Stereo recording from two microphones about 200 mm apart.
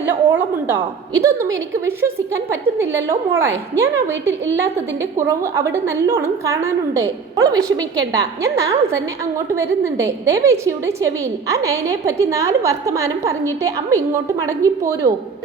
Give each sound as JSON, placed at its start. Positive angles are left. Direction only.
{"t": 0.0, "sound": "a woman's voice", "side_deg": -10}
{"t": 5.1, "sound": "a woman's voice", "side_deg": -15}